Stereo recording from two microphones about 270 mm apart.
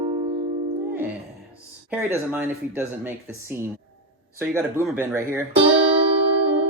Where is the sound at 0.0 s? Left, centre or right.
Centre.